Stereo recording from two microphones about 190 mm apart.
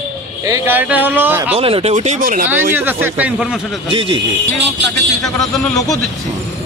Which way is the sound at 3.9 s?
25° right (ahead or behind).